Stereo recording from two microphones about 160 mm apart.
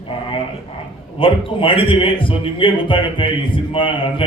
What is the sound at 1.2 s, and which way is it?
A man's voice, 35° left (ahead or behind).